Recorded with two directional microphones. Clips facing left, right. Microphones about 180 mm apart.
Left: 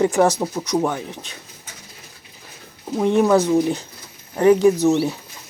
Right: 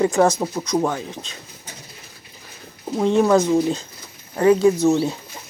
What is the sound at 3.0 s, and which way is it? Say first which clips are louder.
Speech: even; 15° left (ahead or behind).